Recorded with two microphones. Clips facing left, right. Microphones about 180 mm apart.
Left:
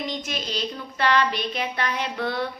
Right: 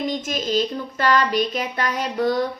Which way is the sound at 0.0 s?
45° right (ahead or behind).